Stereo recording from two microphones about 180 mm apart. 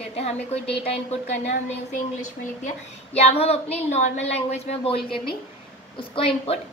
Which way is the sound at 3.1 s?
35° left (ahead or behind).